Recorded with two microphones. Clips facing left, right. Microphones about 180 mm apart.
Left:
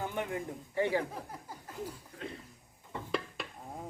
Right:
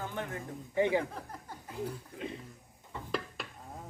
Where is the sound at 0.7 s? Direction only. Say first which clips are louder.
Right 2 dB; 20° right (ahead or behind).